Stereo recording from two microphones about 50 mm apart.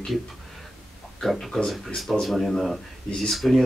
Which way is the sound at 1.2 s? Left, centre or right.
Centre.